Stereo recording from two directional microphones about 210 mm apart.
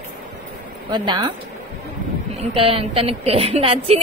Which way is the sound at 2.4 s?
25° right (ahead or behind).